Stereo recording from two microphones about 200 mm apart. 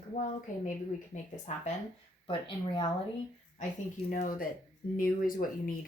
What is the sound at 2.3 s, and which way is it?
Speech, 25° left (ahead or behind).